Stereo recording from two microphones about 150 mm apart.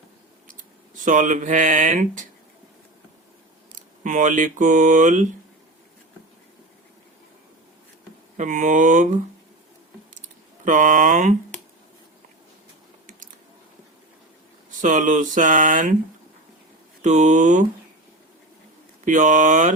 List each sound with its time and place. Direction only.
0.9 s speech: 60° right (ahead or behind)
3.8 s speech: 60° right (ahead or behind)
8.4 s speech: 55° right (ahead or behind)
10.2 s typing: 60° right (ahead or behind)
14.8 s speech: 60° right (ahead or behind)
17.0 s speech: 50° right (ahead or behind)
19.0 s speech: 55° right (ahead or behind)